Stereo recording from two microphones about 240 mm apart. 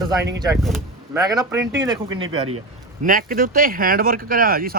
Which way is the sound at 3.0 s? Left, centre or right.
Right.